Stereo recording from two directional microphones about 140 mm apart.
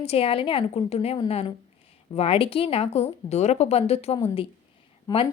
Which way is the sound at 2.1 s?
45° left (ahead or behind).